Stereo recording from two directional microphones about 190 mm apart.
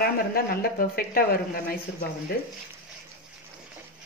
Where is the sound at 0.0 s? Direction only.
50° left (ahead or behind).